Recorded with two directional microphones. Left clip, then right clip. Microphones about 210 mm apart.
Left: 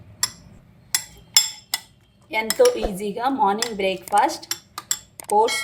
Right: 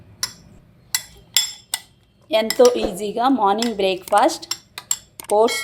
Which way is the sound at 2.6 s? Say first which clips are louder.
Right 2 dB; 30° right (ahead or behind).